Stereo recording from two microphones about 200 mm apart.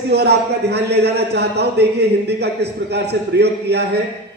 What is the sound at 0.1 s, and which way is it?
Speech, 55° right (ahead or behind).